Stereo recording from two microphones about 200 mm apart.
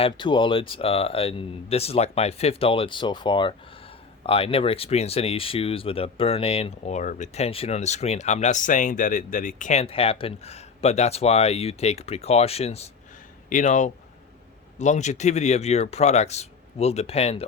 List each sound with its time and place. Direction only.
0.0 s speech: 25° left (ahead or behind)